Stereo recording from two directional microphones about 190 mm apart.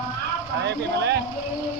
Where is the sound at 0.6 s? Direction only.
65° right (ahead or behind).